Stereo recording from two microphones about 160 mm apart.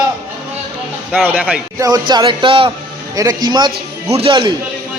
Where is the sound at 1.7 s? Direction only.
25° right (ahead or behind).